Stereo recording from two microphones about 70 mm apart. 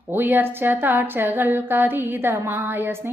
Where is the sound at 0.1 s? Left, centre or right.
Right.